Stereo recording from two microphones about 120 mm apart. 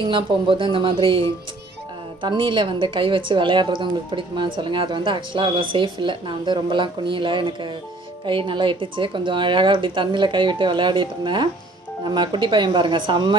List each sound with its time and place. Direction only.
0.1 s a woman's voice: 45° right (ahead or behind)
2.2 s a woman's voice: 40° right (ahead or behind)